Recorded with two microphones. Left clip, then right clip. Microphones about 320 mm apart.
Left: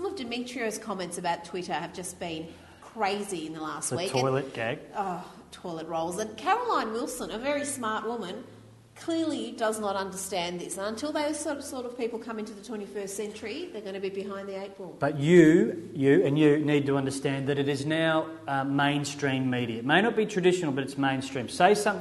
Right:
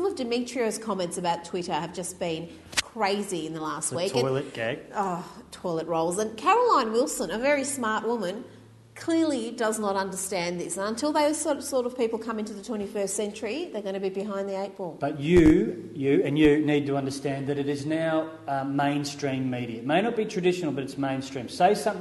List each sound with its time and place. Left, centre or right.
0.0 s a woman's voice: right
4.3 s speech: centre
5.0 s a woman's voice: right
15.0 s speech: left